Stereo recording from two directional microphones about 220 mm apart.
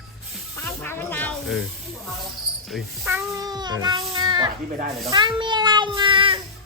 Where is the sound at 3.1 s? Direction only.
15° right (ahead or behind).